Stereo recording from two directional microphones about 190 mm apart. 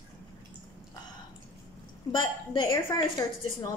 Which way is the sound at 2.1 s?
25° left (ahead or behind).